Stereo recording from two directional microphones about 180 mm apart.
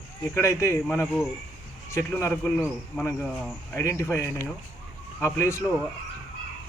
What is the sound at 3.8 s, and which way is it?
Speech, 15° left (ahead or behind).